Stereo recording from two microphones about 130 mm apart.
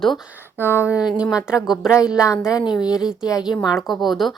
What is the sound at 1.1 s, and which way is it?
Speech, 5° right (ahead or behind).